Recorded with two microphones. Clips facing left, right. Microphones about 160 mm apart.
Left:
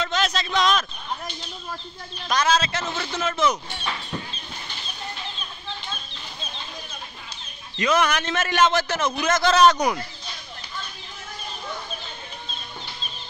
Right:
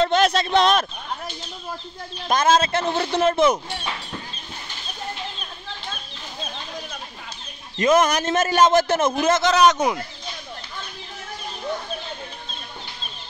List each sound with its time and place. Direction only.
0.0 s speech: 55° right (ahead or behind)
2.2 s a man's voice: 50° right (ahead or behind)
7.7 s a man's voice: 45° right (ahead or behind)
9.3 s a man's voice: 20° right (ahead or behind)